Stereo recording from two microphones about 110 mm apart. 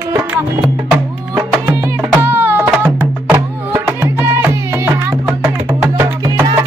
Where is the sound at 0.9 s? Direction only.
20° right (ahead or behind).